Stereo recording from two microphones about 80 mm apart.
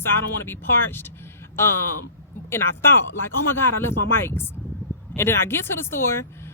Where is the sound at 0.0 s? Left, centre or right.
Left.